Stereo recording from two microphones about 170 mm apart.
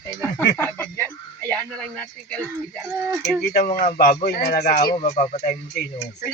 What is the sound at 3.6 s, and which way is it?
Speech, 50° left (ahead or behind).